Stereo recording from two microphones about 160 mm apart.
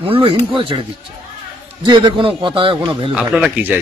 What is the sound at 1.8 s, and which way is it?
Speech, 30° right (ahead or behind).